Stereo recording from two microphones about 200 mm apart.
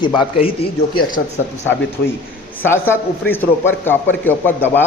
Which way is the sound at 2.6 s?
10° left (ahead or behind).